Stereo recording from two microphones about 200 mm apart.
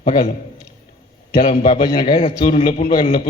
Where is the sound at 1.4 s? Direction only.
40° left (ahead or behind).